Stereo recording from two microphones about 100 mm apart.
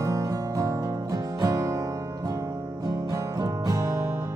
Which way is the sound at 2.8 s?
40° right (ahead or behind).